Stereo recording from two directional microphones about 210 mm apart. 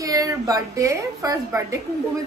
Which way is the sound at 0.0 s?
15° right (ahead or behind).